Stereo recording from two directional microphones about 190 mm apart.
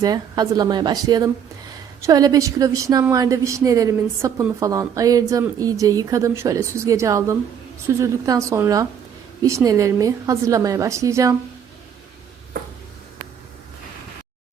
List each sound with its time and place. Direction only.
0.0 s a woman's voice: 20° right (ahead or behind)